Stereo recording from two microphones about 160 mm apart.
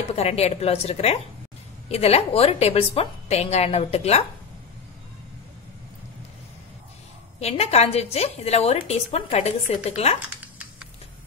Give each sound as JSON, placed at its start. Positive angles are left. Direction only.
{"t": 0.1, "sound": "a woman's voice", "side_deg": 40}
{"t": 7.3, "sound": "a woman's voice", "side_deg": 40}